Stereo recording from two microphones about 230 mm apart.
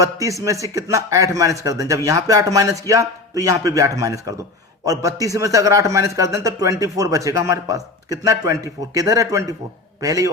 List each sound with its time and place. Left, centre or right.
0.0 s a man's voice: centre